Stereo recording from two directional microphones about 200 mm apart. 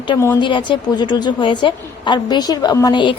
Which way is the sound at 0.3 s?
25° left (ahead or behind).